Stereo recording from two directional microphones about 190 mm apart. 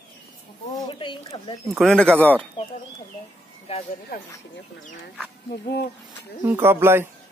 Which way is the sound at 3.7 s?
30° left (ahead or behind).